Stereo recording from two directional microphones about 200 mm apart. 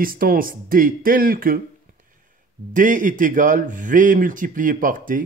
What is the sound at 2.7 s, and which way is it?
Speech, 40° right (ahead or behind).